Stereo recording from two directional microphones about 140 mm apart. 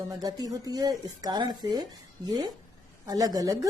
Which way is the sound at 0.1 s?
25° right (ahead or behind).